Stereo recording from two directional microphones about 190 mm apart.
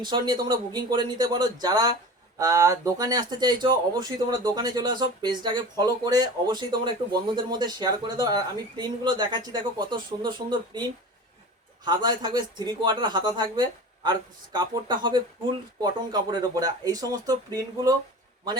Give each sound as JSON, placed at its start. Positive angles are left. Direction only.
{"t": 0.0, "sound": "speech", "side_deg": -25}
{"t": 11.9, "sound": "speech", "side_deg": -20}